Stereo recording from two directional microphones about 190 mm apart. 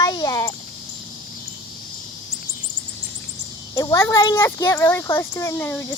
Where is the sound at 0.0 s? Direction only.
20° left (ahead or behind).